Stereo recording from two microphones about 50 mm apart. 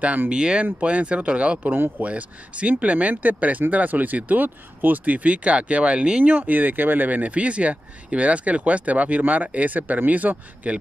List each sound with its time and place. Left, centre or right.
0.3 s speech: centre
6.3 s speech: right